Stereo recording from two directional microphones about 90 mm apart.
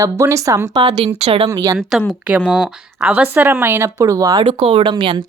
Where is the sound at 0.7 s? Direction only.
50° right (ahead or behind).